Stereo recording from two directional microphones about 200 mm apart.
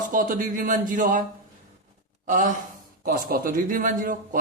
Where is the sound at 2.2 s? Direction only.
40° right (ahead or behind).